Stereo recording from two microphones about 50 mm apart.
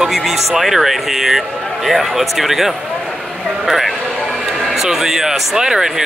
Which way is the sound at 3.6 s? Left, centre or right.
Centre.